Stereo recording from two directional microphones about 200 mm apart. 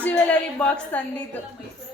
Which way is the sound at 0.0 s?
5° left (ahead or behind).